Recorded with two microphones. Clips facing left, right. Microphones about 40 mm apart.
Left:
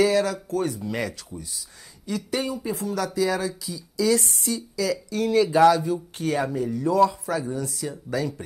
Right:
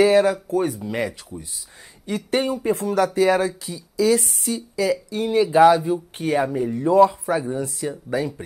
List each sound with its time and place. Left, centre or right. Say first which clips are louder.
0.0 s speech: right 5 dB; right
2.0 s speech: right 5 dB; right